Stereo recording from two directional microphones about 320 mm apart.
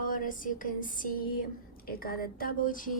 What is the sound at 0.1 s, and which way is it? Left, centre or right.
Speech, left.